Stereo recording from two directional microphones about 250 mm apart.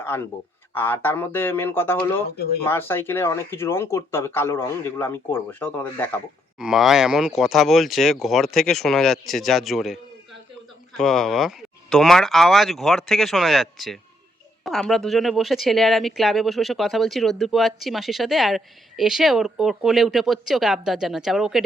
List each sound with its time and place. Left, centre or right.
0.0 s speech: centre